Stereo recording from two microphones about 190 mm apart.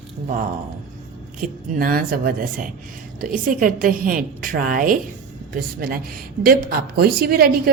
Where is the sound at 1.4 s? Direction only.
50° right (ahead or behind).